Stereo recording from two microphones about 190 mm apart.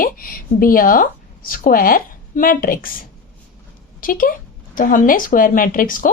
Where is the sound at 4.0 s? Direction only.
45° left (ahead or behind).